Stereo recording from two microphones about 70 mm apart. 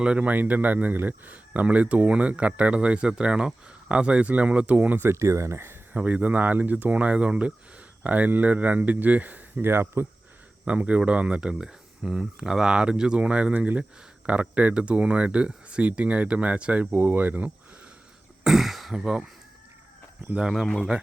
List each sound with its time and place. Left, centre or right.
0.0 s speech: centre
5.0 s speech: right
5.9 s speech: right
10.7 s speech: centre
18.4 s throat clearing: centre
20.2 s speech: centre
20.5 s speech: centre